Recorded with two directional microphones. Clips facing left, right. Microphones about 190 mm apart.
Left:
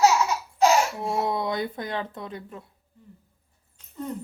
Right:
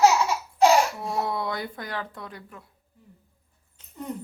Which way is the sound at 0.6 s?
30° right (ahead or behind).